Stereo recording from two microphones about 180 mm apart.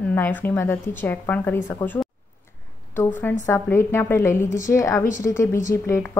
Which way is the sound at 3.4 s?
15° left (ahead or behind).